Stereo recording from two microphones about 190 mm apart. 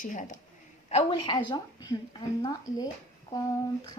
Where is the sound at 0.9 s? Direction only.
30° left (ahead or behind).